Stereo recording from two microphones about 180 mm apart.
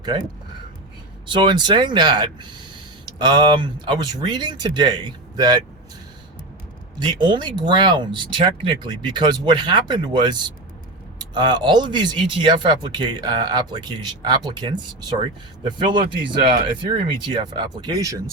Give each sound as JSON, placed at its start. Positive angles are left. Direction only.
{"t": 1.3, "sound": "speech", "side_deg": -25}
{"t": 7.1, "sound": "speech", "side_deg": -25}